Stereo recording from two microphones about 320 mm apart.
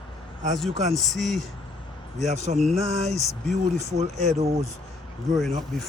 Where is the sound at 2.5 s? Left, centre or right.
Centre.